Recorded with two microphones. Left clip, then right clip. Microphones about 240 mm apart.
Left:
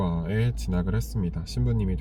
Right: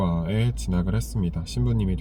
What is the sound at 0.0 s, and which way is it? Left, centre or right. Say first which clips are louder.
Speech: right 2 dB; centre.